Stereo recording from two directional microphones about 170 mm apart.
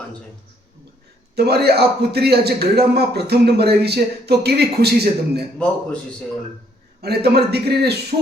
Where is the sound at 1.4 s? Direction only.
70° right (ahead or behind).